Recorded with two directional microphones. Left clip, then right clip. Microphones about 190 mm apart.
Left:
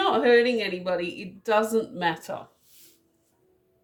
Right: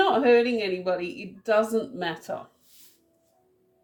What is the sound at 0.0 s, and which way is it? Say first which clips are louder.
A woman's voice: even; 35° left (ahead or behind).